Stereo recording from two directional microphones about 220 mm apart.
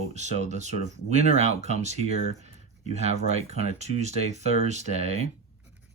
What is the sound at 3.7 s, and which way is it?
Speech, 30° right (ahead or behind).